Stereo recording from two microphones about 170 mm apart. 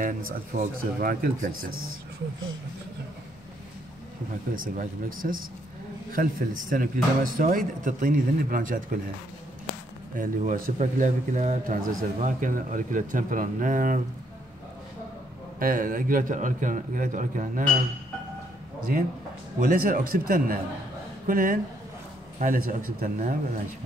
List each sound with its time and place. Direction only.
0.0 s speech: 55° right (ahead or behind)
4.7 s a man's voice: 55° right (ahead or behind)
10.1 s a man's voice: 50° right (ahead or behind)
15.6 s a man's voice: 55° right (ahead or behind)
18.9 s a man's voice: 60° right (ahead or behind)